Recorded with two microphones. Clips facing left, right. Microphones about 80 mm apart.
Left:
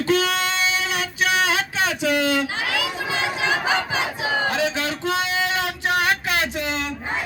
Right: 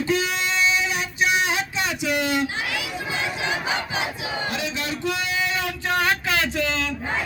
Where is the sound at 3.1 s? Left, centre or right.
Left.